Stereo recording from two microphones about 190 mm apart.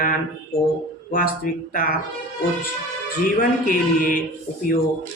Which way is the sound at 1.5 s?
45° left (ahead or behind).